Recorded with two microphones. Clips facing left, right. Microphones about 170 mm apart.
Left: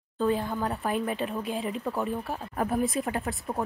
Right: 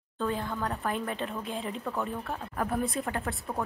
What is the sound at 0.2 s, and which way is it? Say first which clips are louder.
A woman's voice: left 5 dB; 15° left (ahead or behind).